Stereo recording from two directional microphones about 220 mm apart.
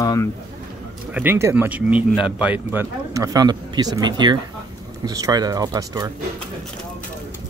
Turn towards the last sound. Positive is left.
turn(degrees=-15)  # may be behind; listen again after turning